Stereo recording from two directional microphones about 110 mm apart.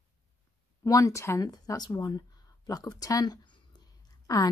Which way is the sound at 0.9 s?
30° left (ahead or behind).